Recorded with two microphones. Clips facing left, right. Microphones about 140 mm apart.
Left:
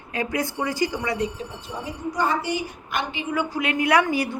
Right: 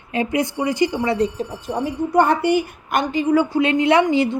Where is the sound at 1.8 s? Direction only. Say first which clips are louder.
Right 8 dB; 60° right (ahead or behind).